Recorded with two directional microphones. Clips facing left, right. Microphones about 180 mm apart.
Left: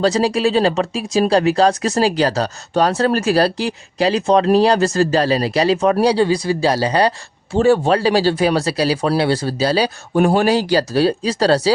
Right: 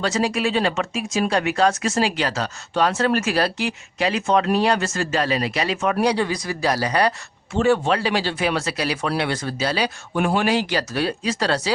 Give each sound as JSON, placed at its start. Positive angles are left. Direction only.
{"t": 0.0, "sound": "speech", "side_deg": 35}